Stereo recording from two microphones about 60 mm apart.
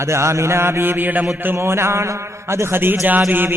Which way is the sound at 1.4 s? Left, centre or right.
Right.